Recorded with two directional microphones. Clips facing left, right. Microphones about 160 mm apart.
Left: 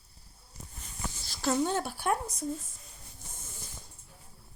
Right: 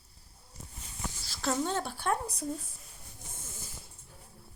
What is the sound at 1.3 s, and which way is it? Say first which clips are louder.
Speech: left 3 dB; centre (ahead or behind).